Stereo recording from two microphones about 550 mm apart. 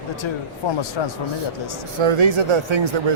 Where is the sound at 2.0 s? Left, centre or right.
Right.